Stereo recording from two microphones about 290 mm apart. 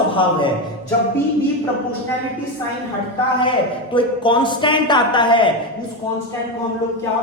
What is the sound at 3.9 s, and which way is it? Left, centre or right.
Speech, centre.